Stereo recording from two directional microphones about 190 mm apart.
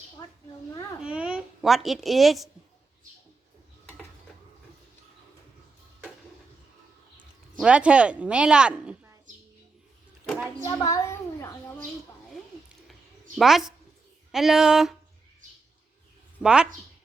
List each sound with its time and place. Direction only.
0.7 s a child's voice: 20° left (ahead or behind)
1.0 s a child's voice: 5° right (ahead or behind)
7.6 s a woman's voice: 5° right (ahead or behind)
10.6 s a sound: 15° left (ahead or behind)
13.3 s a woman's voice: centre (ahead or behind)
16.4 s a woman's voice: 5° right (ahead or behind)